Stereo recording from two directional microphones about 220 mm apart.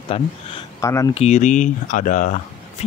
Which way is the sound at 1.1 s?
30° left (ahead or behind).